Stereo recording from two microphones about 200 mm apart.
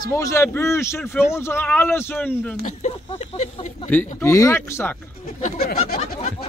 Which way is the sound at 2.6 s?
35° left (ahead or behind).